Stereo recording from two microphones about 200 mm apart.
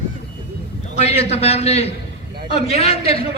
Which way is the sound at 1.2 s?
30° left (ahead or behind).